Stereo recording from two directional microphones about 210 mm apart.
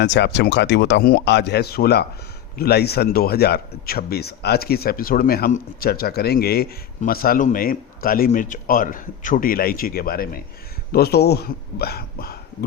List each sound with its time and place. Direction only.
0.0 s speech: 55° left (ahead or behind)